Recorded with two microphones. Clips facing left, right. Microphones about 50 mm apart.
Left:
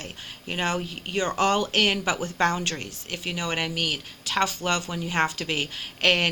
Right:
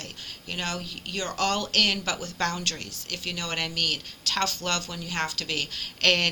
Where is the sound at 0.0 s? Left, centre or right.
Left.